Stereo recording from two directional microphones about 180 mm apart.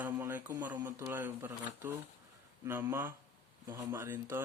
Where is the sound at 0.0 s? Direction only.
10° right (ahead or behind).